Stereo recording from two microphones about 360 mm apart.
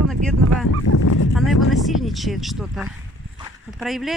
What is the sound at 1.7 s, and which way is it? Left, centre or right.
Speech, centre.